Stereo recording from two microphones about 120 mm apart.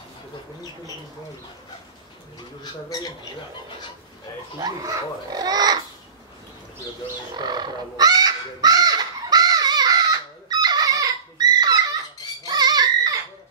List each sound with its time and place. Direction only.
2.6 s speech: 30° left (ahead or behind)
4.6 s speech: 30° right (ahead or behind)
7.3 s goose: 35° right (ahead or behind)
10.5 s dog: 35° right (ahead or behind)
12.4 s a sound: 35° right (ahead or behind)